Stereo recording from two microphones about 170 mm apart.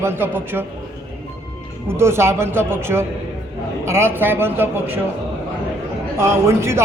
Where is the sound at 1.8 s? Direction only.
15° right (ahead or behind).